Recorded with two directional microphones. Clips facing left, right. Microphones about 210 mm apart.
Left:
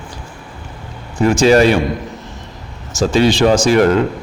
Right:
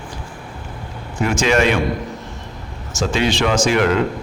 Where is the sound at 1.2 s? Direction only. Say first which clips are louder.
Left 6 dB; 35° left (ahead or behind).